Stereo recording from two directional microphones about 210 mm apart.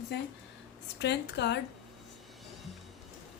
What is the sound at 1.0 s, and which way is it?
Speech, 55° left (ahead or behind).